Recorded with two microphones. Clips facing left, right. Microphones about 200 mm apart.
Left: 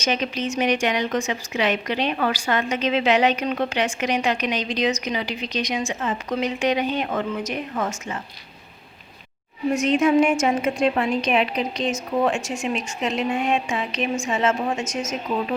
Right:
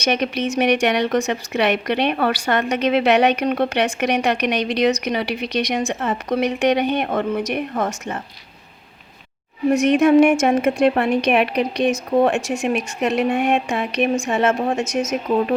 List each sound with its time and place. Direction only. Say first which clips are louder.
0.0 s a woman's voice: right 4 dB; 65° right (ahead or behind)
7.7 s a woman's voice: right 3 dB; 40° right (ahead or behind)
9.7 s a woman's voice: right 5 dB; 65° right (ahead or behind)